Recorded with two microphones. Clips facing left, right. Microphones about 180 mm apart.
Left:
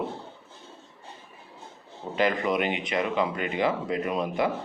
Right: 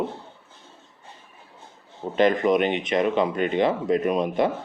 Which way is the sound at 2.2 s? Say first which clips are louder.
Right 6 dB; 20° right (ahead or behind).